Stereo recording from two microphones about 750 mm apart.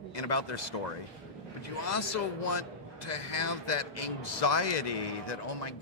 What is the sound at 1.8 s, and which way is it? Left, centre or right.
A man's voice, left.